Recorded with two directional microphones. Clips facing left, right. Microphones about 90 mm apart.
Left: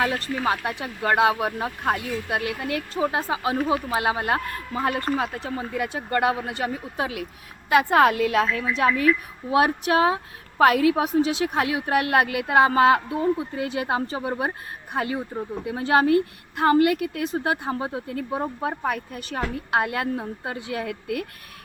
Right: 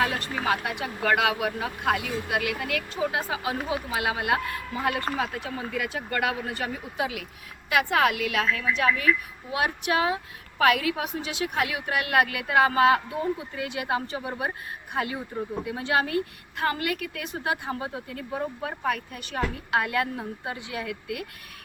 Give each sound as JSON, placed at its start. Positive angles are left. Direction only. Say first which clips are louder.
{"t": 0.1, "sound": "speech", "louder": "left 2 dB", "side_deg": -25}
{"t": 1.0, "sound": "a woman's voice", "louder": "left 4 dB", "side_deg": 30}